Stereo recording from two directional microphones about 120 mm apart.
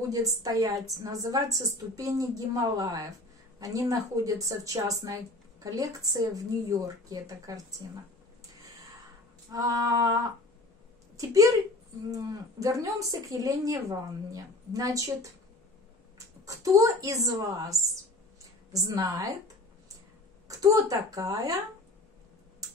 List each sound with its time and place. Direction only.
0.1 s a woman's voice: 30° right (ahead or behind)
9.5 s female singing: 30° right (ahead or behind)
11.1 s a woman's voice: 30° right (ahead or behind)
16.4 s a woman's voice: 30° right (ahead or behind)
18.9 s a woman's voice: 30° right (ahead or behind)